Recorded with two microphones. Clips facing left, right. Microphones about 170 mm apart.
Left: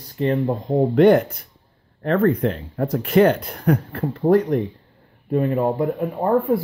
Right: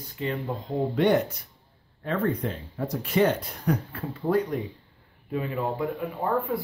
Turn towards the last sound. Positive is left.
turn(degrees=40)  # may be behind; listen again after turning